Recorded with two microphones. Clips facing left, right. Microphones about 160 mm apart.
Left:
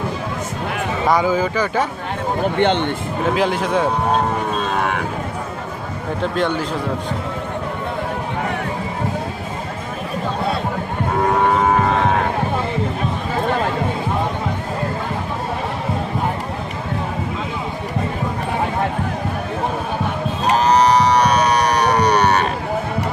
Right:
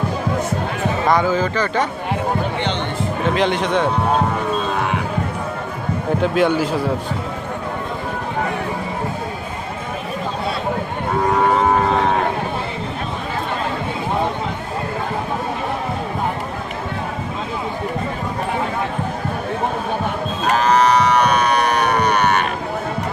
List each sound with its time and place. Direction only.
1.0 s speech: 10° left (ahead or behind)
2.6 s speech: 55° left (ahead or behind)
3.2 s speech: 5° left (ahead or behind)
6.2 s speech: 5° right (ahead or behind)
20.5 s a sound: 35° left (ahead or behind)